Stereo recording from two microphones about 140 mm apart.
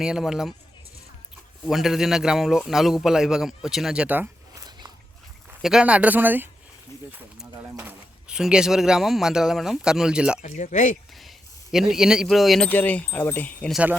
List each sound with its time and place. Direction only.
0.0 s a man's voice: 5° right (ahead or behind)
1.6 s a man's voice: centre (ahead or behind)
5.6 s speech: 5° right (ahead or behind)
7.8 s a man's voice: 10° right (ahead or behind)
10.4 s speech: 60° left (ahead or behind)
11.1 s speech: centre (ahead or behind)
12.6 s speech: 10° left (ahead or behind)